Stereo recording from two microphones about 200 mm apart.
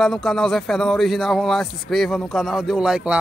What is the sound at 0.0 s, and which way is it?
Speech, centre (ahead or behind).